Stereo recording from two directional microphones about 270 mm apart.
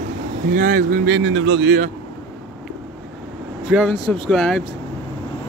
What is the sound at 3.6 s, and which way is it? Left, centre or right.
Speech, centre.